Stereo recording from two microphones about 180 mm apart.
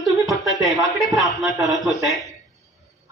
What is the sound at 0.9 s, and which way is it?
Speech, centre (ahead or behind).